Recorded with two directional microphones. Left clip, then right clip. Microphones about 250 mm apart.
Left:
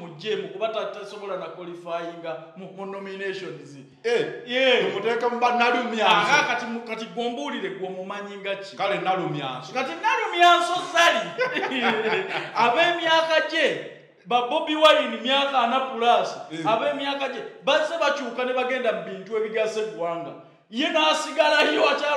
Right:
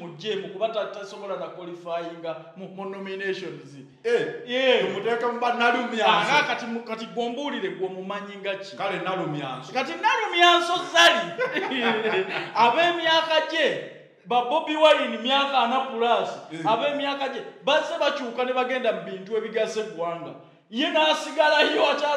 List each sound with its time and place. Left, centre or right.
0.2 s a man's voice: centre
1.9 s a man's voice: centre
4.1 s a man's voice: left
4.5 s a man's voice: centre
5.0 s a man's voice: left
6.0 s a man's voice: centre
8.7 s a man's voice: left
9.8 s speech: centre
11.4 s a man's voice: left
12.3 s a man's voice: centre